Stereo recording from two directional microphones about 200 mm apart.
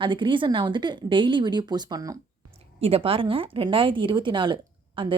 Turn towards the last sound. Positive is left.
turn(degrees=-25)  # may be behind; listen again after turning